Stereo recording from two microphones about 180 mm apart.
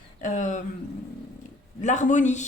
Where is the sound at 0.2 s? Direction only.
45° left (ahead or behind).